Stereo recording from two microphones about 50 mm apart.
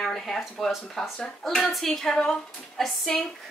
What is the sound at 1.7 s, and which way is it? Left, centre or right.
Speech, centre.